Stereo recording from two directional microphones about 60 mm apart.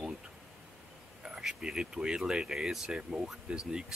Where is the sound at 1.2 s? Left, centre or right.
Centre.